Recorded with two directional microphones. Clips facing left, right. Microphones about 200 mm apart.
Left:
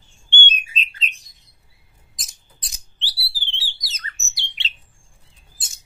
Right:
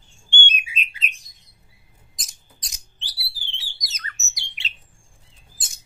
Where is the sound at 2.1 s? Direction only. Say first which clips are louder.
Left 1 dB; centre (ahead or behind).